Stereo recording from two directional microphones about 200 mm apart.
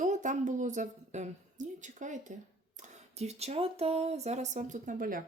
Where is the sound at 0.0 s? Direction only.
40° right (ahead or behind).